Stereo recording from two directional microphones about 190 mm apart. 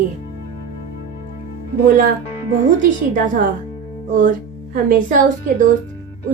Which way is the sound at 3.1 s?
45° right (ahead or behind).